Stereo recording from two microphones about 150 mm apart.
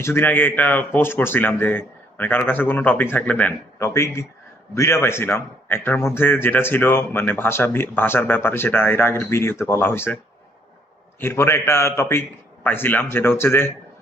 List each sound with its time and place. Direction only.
0.0 s a man's voice: 15° left (ahead or behind)
11.2 s a man's voice: 15° left (ahead or behind)